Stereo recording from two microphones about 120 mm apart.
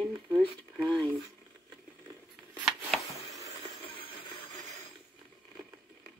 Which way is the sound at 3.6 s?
45° left (ahead or behind).